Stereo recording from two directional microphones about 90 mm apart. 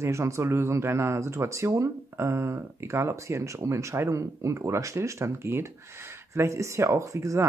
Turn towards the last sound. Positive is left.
turn(degrees=-35)  # may be behind; listen again after turning